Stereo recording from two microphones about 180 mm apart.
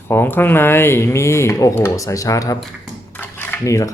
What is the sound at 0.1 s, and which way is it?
Speech, 10° left (ahead or behind).